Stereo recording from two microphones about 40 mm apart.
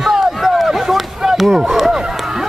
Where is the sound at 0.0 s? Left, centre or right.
Centre.